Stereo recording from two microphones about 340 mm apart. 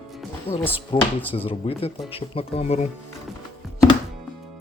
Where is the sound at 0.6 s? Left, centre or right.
Centre.